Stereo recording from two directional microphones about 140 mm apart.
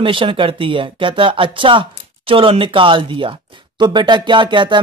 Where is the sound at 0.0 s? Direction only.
40° right (ahead or behind).